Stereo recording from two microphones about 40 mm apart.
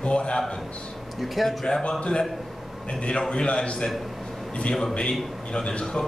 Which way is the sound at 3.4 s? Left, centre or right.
Left.